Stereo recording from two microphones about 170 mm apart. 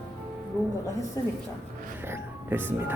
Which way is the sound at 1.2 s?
20° left (ahead or behind).